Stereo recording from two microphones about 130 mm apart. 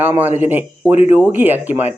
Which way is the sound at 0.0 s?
15° right (ahead or behind).